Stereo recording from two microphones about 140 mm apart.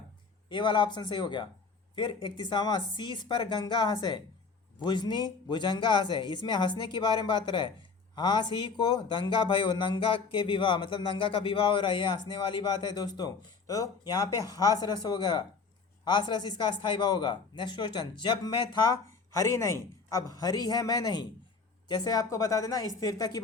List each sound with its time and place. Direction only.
0.5 s a man's voice: 35° left (ahead or behind)